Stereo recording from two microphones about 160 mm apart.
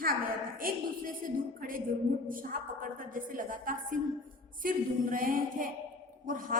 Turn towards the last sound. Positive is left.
turn(degrees=-60)  # may be behind; listen again after turning